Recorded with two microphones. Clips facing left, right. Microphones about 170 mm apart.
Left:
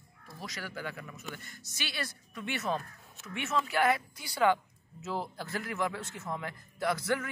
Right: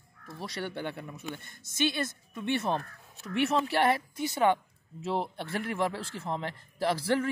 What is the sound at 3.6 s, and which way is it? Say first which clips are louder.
A man's voice: right 2 dB; 30° right (ahead or behind).